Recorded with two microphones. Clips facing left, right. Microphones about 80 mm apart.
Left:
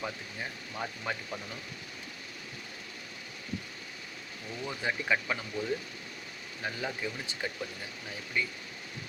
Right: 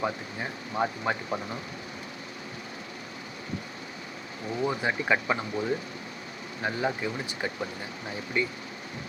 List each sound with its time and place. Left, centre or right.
0.0 s speech: right
4.5 s speech: right